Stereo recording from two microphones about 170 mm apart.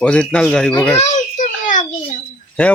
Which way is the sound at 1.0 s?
45° left (ahead or behind).